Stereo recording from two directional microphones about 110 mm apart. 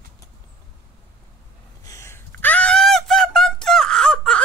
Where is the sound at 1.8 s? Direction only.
25° left (ahead or behind).